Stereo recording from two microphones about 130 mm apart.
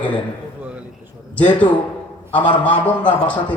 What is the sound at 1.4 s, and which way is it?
A man's voice, 10° left (ahead or behind).